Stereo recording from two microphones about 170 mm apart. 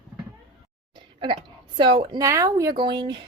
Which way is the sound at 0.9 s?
30° right (ahead or behind).